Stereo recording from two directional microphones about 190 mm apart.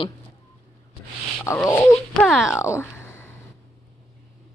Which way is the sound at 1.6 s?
15° left (ahead or behind).